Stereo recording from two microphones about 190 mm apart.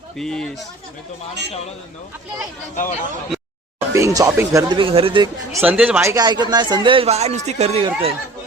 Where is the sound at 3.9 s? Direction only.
15° right (ahead or behind).